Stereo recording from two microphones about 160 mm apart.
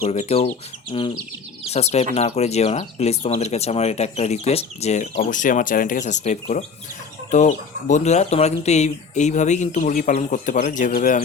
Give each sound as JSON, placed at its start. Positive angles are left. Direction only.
{"t": 0.0, "sound": "speech", "side_deg": 40}